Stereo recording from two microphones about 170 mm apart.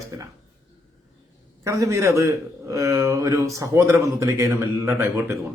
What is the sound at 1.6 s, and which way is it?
A man's voice, 20° right (ahead or behind).